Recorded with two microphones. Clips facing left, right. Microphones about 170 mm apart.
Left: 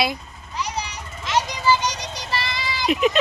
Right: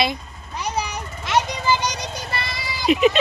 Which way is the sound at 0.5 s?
55° right (ahead or behind).